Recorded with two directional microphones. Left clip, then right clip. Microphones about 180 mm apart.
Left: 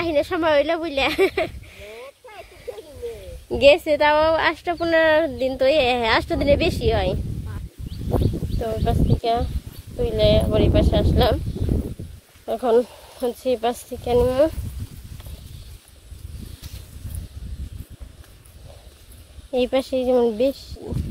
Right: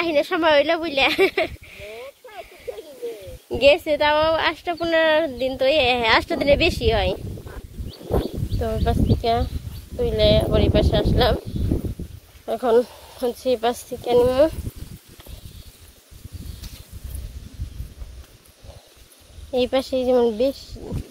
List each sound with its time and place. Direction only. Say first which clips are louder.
0.0 s sheep: right 1 dB; 10° left (ahead or behind)
3.4 s a woman's voice: left 2 dB; 20° left (ahead or behind)
8.5 s speech: right 1 dB; 5° left (ahead or behind)
12.4 s speech: even; 10° left (ahead or behind)
19.5 s speech: even; 15° left (ahead or behind)